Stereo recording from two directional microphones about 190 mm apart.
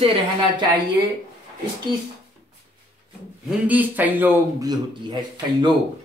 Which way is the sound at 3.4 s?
5° right (ahead or behind).